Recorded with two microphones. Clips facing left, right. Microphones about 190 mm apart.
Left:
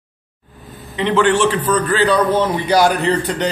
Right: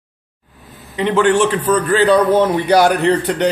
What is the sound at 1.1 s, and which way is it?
Speech, 45° right (ahead or behind).